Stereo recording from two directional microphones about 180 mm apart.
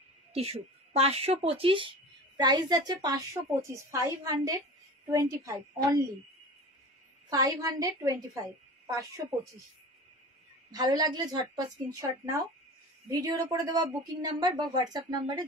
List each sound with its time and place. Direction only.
0.3 s a woman's voice: 35° right (ahead or behind); by 6.0 s 15° right (ahead or behind)
7.2 s speech: 20° right (ahead or behind)
10.7 s speech: 20° right (ahead or behind)